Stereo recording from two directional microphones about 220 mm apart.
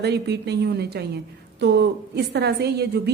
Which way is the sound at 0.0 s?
50° right (ahead or behind).